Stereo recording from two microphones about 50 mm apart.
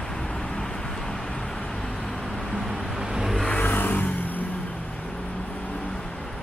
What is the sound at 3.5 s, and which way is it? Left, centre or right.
Vehicle, left.